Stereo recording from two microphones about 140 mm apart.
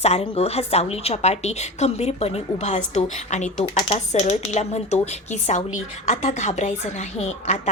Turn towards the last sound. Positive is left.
turn(degrees=50)  # may be behind; listen again after turning